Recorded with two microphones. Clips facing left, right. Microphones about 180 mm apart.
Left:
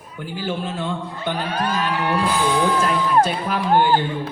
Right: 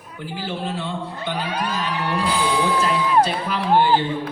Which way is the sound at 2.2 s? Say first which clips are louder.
Even; 50° left (ahead or behind).